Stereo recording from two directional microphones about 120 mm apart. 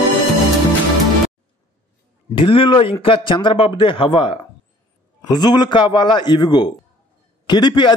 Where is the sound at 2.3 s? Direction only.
45° left (ahead or behind).